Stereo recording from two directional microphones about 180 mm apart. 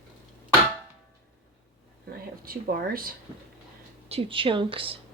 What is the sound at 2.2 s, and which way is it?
Speech, 55° right (ahead or behind).